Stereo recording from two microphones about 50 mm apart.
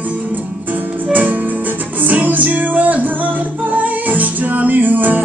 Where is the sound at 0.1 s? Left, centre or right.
Right.